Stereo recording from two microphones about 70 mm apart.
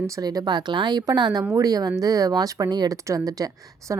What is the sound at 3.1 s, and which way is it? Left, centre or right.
Speech, right.